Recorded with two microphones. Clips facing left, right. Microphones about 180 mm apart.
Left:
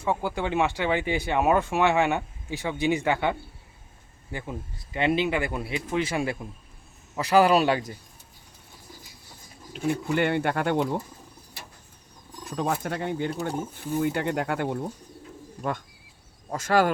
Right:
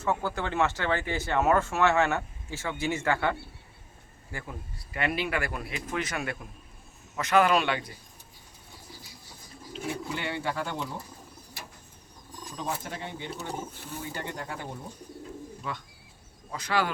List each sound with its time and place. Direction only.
0.0 s a man's voice: 15° left (ahead or behind); by 7.9 s 40° left (ahead or behind)
9.9 s speech: 55° left (ahead or behind)
12.5 s speech: 55° left (ahead or behind)
14.0 s speech: 65° left (ahead or behind)
15.6 s speech: 50° left (ahead or behind)